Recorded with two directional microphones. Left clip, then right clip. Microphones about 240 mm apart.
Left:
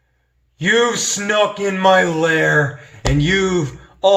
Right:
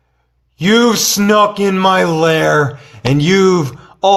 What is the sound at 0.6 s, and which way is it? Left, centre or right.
A man's voice, right.